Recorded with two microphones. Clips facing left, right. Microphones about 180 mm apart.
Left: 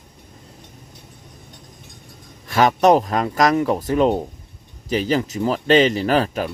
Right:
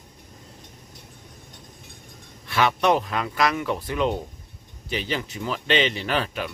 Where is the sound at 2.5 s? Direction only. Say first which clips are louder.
Left 6 dB; 40° left (ahead or behind).